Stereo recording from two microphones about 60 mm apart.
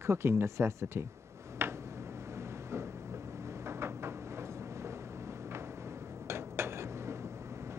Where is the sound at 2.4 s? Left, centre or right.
Right.